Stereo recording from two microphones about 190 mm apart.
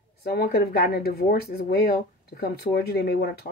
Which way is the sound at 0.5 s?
55° left (ahead or behind).